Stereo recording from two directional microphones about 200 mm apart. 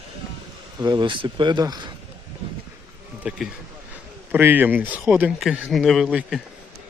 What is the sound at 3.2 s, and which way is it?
A man's voice, 5° right (ahead or behind).